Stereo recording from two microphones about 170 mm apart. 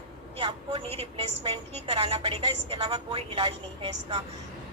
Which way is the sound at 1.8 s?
30° right (ahead or behind).